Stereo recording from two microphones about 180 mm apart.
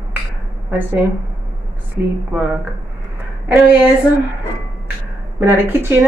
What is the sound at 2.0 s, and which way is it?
Speech, 15° right (ahead or behind).